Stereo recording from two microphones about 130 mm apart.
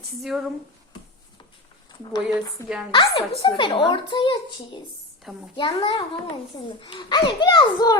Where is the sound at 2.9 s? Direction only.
40° left (ahead or behind).